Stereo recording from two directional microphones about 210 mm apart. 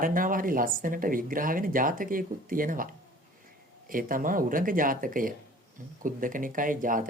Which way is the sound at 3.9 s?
40° right (ahead or behind).